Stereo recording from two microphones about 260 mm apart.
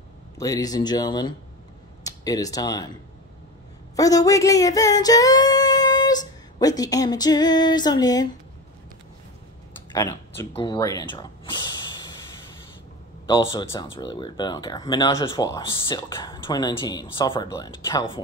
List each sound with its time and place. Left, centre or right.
0.4 s speech: centre
3.9 s a sound: centre
9.9 s speech: centre
13.3 s speech: centre